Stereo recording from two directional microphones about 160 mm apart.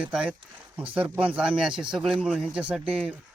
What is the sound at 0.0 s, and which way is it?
Speech, 5° right (ahead or behind).